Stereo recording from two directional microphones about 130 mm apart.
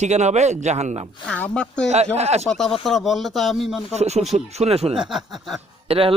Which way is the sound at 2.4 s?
5° left (ahead or behind).